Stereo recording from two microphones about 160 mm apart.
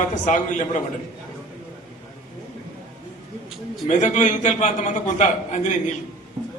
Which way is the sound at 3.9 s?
50° left (ahead or behind).